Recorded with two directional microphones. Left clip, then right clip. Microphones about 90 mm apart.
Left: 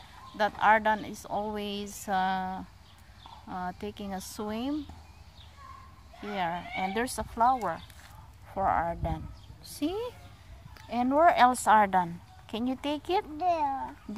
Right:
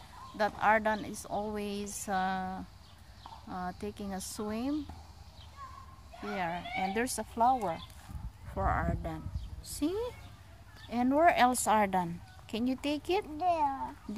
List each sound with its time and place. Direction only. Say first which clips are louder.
0.4 s a woman's voice: left 4 dB; 15° left (ahead or behind)
6.2 s speech: left 3 dB; 20° left (ahead or behind)
7.1 s speech: left 3 dB; 10° right (ahead or behind)
10.9 s speech: left 3 dB; 30° right (ahead or behind)
11.5 s speech: left 6 dB; 15° right (ahead or behind)
12.4 s speech: left 2 dB; 5° right (ahead or behind)